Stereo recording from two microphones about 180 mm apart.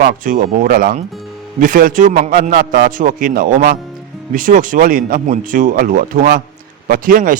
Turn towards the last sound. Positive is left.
turn(degrees=-50)  # may be behind; listen again after turning